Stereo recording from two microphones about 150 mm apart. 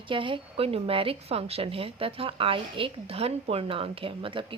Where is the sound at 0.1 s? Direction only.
35° right (ahead or behind).